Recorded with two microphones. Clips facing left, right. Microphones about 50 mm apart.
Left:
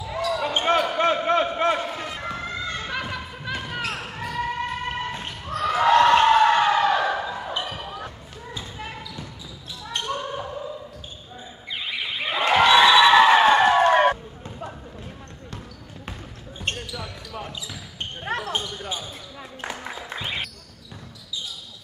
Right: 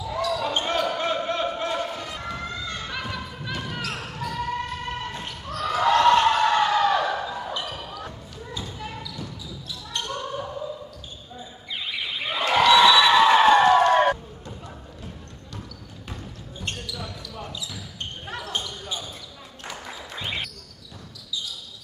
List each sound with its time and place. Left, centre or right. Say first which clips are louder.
0.0 s basketball bounce: even; left
0.9 s basketball bounce: left 5 dB; left
1.8 s a sound: left 1 dB; left
4.2 s basketball bounce: left 1 dB; left
12.3 s a sound: left 1 dB; centre
16.6 s basketball bounce: left 3 dB; left
18.5 s basketball bounce: left 2 dB; left
19.6 s music: left 3 dB; left